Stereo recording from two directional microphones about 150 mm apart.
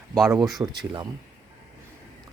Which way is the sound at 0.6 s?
20° right (ahead or behind).